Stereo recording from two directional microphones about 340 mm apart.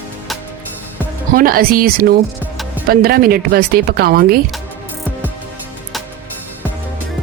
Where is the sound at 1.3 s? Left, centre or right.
Right.